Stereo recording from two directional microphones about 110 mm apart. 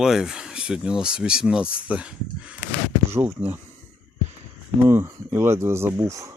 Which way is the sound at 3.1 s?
25° right (ahead or behind).